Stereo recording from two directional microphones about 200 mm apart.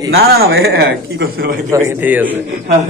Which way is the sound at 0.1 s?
50° right (ahead or behind).